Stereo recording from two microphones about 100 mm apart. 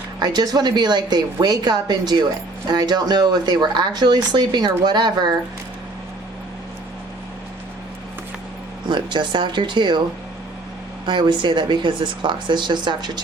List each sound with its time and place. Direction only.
0.2 s speech: 45° right (ahead or behind)
8.9 s speech: 50° right (ahead or behind)
11.0 s speech: 50° right (ahead or behind)